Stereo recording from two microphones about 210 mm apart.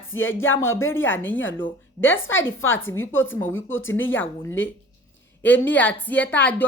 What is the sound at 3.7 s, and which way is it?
Speech, 65° left (ahead or behind).